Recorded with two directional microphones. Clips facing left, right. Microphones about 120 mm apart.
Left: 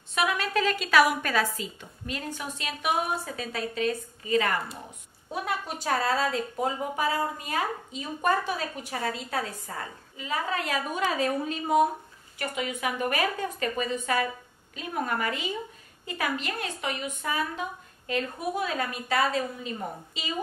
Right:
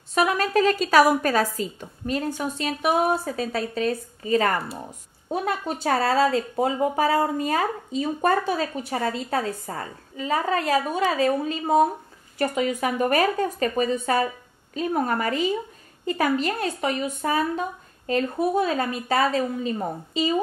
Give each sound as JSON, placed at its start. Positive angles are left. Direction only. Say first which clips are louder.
{"t": 0.1, "sound": "a woman's voice", "louder": "right 6 dB", "side_deg": -40}